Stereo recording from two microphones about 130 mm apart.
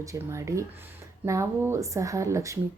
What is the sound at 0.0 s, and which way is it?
Speech, 25° right (ahead or behind).